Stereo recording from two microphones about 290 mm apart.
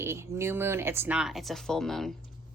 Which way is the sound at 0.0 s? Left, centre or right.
Centre.